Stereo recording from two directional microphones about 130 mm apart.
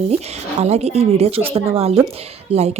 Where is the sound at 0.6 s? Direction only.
55° right (ahead or behind).